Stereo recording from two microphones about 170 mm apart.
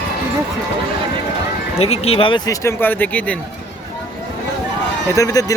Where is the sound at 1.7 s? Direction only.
35° left (ahead or behind); by 3.3 s 10° left (ahead or behind).